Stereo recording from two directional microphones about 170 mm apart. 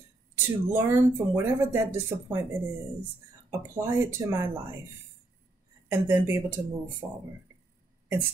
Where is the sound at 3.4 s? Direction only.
15° right (ahead or behind).